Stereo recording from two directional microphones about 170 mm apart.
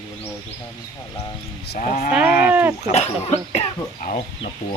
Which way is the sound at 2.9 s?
40° left (ahead or behind).